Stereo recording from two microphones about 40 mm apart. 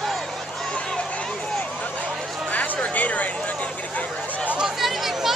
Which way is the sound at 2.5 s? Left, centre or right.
Left.